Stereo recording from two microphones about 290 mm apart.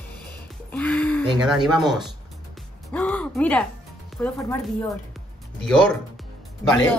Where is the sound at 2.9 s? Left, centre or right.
Centre.